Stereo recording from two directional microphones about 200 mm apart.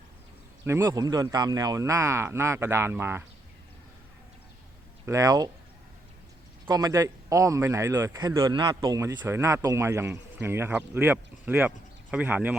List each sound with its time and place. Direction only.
0.6 s speech: 15° right (ahead or behind)
5.0 s speech: 15° right (ahead or behind)
6.7 s speech: 20° right (ahead or behind)